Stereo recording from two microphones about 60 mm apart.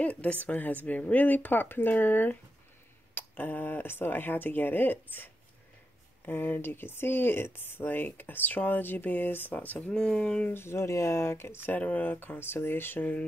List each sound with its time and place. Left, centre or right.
0.0 s a woman's voice: left
10.5 s speech: left
11.8 s speech: left